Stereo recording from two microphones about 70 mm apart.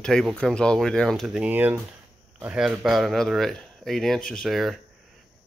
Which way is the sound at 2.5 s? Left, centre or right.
Centre.